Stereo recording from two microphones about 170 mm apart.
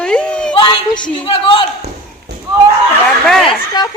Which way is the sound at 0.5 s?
30° left (ahead or behind).